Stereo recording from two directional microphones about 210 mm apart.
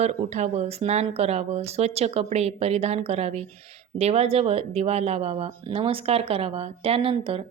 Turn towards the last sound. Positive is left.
turn(degrees=-25)  # may be behind; listen again after turning